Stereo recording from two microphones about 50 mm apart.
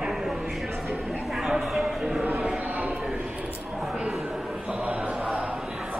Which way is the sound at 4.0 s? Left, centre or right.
Centre.